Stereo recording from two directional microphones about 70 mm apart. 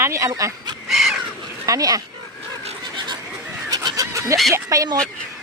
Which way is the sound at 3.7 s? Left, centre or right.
Right.